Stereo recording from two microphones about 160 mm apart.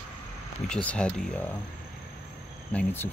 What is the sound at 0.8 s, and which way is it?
Speech, 5° left (ahead or behind).